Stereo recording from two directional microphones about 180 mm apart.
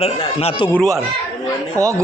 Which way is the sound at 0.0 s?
35° left (ahead or behind).